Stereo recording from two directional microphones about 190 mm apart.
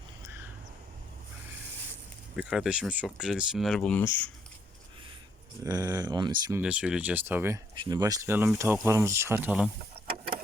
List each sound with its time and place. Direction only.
2.3 s speech: 5° right (ahead or behind)
5.6 s speech: 20° right (ahead or behind)
6.6 s speech: 5° right (ahead or behind)